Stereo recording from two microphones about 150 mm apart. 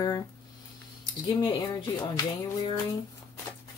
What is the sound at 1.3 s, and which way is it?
Speech, 30° left (ahead or behind).